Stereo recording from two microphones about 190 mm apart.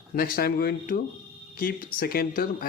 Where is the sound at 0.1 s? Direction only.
50° left (ahead or behind).